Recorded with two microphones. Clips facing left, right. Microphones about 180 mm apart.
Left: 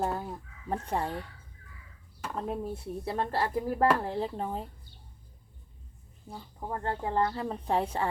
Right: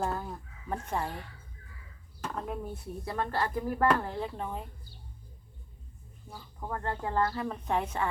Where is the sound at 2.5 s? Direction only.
30° left (ahead or behind).